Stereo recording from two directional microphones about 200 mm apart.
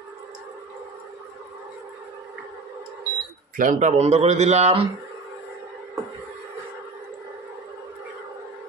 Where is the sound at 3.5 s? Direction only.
40° right (ahead or behind).